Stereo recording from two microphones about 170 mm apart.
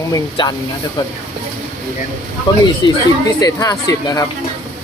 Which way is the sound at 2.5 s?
25° left (ahead or behind).